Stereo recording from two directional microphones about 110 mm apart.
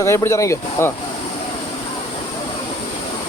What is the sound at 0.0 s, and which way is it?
Speech, 25° left (ahead or behind).